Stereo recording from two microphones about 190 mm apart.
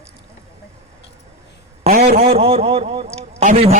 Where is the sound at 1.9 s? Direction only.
45° right (ahead or behind).